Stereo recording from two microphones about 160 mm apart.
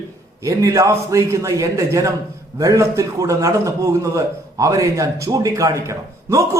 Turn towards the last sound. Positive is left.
turn(degrees=-20)  # may be behind; listen again after turning